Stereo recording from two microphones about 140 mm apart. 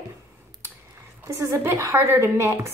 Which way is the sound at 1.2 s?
15° right (ahead or behind).